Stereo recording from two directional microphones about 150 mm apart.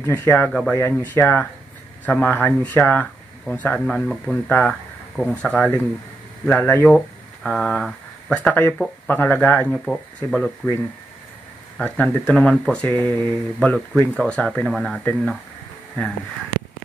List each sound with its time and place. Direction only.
0.0 s speech: 15° left (ahead or behind)
11.8 s speech: 10° left (ahead or behind)